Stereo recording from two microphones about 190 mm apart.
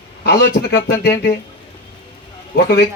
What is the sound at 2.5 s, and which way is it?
Speech, 55° left (ahead or behind).